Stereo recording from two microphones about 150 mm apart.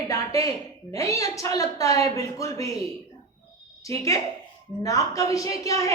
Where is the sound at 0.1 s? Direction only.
20° left (ahead or behind).